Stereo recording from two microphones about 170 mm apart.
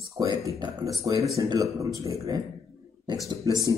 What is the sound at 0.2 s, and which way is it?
Speech, 20° right (ahead or behind).